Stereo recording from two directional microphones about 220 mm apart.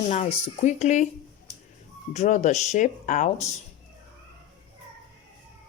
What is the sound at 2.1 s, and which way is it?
Speech, 35° left (ahead or behind).